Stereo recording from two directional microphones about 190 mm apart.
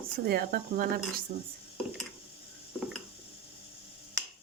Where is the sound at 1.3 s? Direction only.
40° right (ahead or behind).